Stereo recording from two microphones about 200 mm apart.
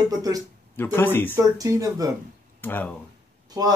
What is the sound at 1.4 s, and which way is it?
Speech, 15° right (ahead or behind).